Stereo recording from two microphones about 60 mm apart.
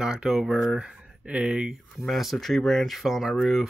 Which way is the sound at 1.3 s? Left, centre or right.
Right.